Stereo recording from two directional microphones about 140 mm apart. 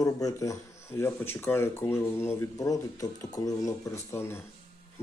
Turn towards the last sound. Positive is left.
turn(degrees=20)  # may be behind; listen again after turning